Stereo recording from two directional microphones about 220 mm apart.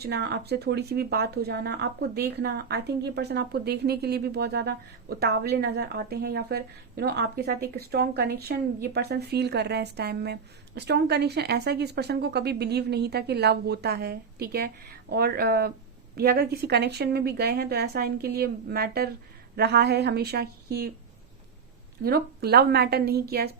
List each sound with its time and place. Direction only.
0.0 s speech: 45° right (ahead or behind)
22.0 s speech: 45° right (ahead or behind)